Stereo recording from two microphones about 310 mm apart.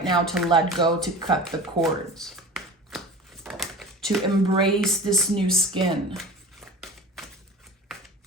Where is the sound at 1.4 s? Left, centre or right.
Centre.